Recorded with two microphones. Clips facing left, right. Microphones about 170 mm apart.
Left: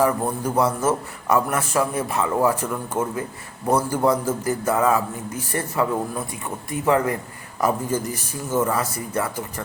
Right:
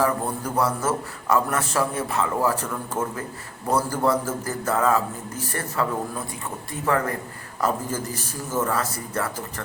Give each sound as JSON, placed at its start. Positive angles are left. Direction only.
{"t": 0.0, "sound": "a man's voice", "side_deg": 20}